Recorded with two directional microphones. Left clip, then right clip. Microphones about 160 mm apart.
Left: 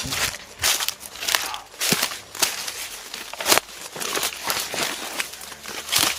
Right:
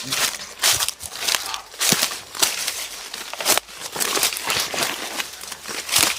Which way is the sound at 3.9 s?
30° right (ahead or behind).